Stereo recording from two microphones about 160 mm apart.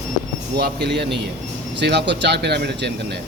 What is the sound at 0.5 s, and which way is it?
A man's voice, 90° right.